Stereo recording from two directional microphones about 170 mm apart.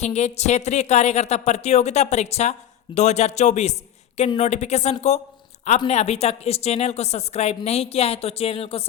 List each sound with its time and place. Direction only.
0.0 s a woman's voice: 40° left (ahead or behind)